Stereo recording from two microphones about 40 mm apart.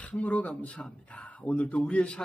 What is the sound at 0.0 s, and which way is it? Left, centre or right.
Speech, left.